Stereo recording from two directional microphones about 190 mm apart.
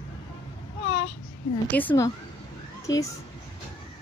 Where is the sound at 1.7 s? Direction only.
15° left (ahead or behind).